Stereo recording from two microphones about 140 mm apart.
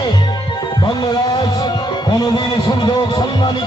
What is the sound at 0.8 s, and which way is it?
Music, 30° left (ahead or behind).